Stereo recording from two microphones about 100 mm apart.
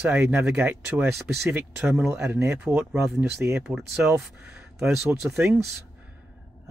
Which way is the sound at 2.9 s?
5° right (ahead or behind).